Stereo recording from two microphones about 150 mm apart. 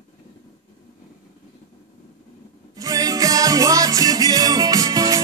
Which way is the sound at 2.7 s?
25° right (ahead or behind).